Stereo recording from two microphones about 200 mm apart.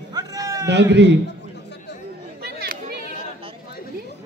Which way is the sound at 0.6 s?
60° right (ahead or behind).